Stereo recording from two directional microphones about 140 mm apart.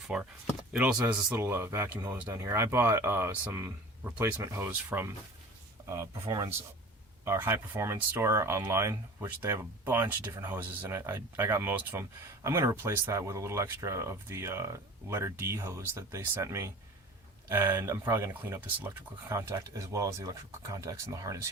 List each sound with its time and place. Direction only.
0.1 s speech: 5° right (ahead or behind); by 21.4 s 25° right (ahead or behind)